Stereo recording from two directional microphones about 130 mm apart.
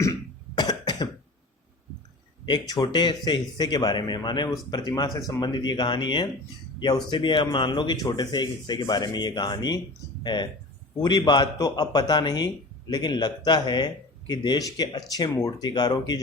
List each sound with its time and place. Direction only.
0.0 s cough: 30° left (ahead or behind)
2.5 s speech: 30° left (ahead or behind)